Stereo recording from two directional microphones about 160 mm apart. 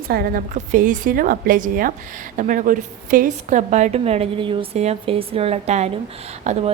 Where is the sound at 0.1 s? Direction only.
65° right (ahead or behind); by 6.7 s 45° right (ahead or behind).